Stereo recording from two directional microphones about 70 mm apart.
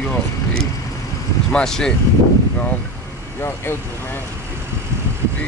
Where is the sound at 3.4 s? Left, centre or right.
Left.